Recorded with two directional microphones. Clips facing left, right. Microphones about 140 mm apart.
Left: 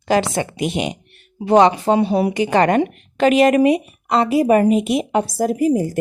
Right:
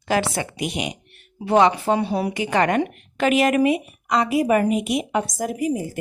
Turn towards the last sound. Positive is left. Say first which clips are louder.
# left 7 dB
turn(degrees=35)  # may be behind; listen again after turning